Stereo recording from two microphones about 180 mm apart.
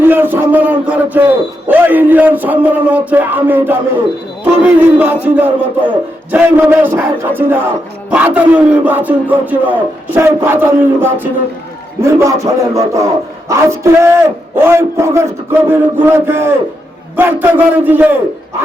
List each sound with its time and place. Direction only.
0.0 s speech: 10° right (ahead or behind)